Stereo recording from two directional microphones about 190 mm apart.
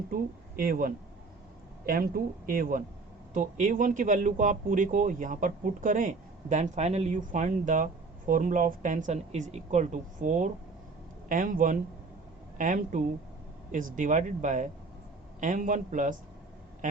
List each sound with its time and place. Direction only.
0.1 s speech: 50° right (ahead or behind)